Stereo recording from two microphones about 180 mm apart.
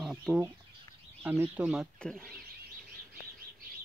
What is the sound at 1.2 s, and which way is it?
Speech, 10° right (ahead or behind).